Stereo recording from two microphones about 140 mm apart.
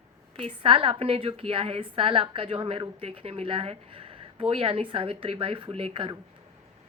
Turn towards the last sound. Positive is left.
turn(degrees=-40)  # may be behind; listen again after turning